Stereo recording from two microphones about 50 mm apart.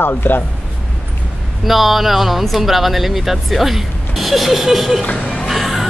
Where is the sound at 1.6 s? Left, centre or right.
Centre.